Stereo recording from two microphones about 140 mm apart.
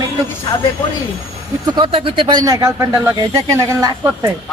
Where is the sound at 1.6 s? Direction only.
35° right (ahead or behind).